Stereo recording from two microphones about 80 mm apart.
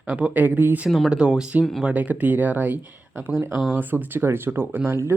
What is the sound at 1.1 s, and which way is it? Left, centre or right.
A man's voice, centre.